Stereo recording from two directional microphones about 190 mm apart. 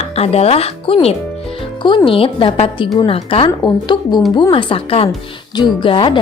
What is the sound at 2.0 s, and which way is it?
A woman's voice, 30° left (ahead or behind).